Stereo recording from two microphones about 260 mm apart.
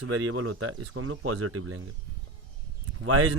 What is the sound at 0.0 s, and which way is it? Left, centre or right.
A man's voice, right.